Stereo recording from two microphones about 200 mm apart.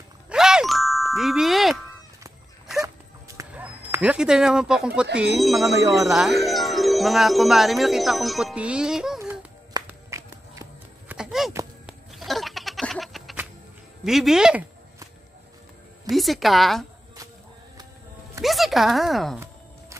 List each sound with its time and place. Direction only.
0.3 s music: 5° right (ahead or behind)
2.8 s dog: 15° right (ahead or behind)
5.1 s speech: 5° right (ahead or behind)
5.7 s speech: 15° right (ahead or behind)
6.0 s speech: centre (ahead or behind)
9.2 s a sound: 15° right (ahead or behind)
11.1 s a sound: centre (ahead or behind)
11.8 s goat: centre (ahead or behind)
14.0 s speech: centre (ahead or behind)
16.1 s speech: centre (ahead or behind)
18.4 s speech: centre (ahead or behind)